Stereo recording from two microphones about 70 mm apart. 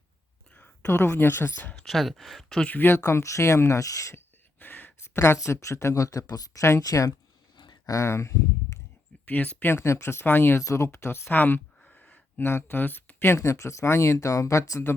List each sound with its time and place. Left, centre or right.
0.5 s a woman's voice: left
1.7 s speech: centre
2.6 s speech: left
3.0 s speech: left
4.6 s a sound: left
5.0 s speech: left
7.5 s a sound: left
7.9 s speech: left
9.2 s speech: left
9.7 s speech: left
10.6 s speech: left
11.3 s speech: left
11.8 s a sound: centre
12.5 s speech: left